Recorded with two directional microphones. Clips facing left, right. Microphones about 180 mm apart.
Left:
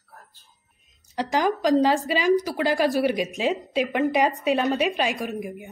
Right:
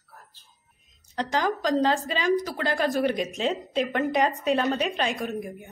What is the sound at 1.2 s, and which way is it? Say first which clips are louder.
A woman's voice: left 4 dB; 15° left (ahead or behind).